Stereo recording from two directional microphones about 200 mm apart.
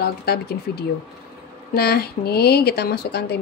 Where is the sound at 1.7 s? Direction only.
50° left (ahead or behind).